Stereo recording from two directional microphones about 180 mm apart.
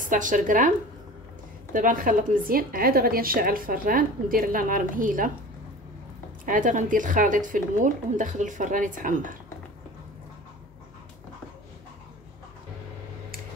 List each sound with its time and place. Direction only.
0.0 s a woman's voice: 45° right (ahead or behind)
6.4 s a woman's voice: 45° right (ahead or behind)